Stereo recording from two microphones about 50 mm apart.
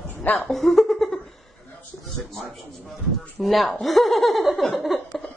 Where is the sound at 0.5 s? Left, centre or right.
Centre.